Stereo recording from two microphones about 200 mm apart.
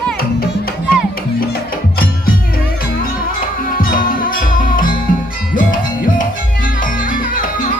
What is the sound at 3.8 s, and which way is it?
Music, 45° left (ahead or behind).